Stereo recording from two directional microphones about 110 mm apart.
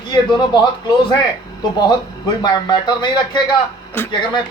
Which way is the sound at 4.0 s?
20° left (ahead or behind).